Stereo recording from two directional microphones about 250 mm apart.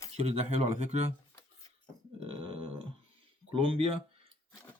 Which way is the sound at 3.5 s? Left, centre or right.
Right.